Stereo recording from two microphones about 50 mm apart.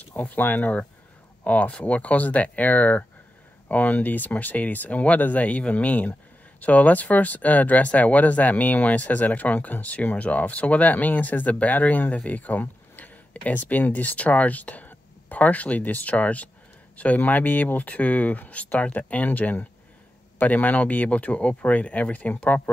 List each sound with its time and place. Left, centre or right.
0.0 s speech: left